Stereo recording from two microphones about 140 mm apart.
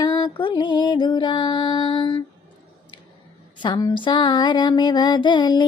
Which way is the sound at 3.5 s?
35° left (ahead or behind).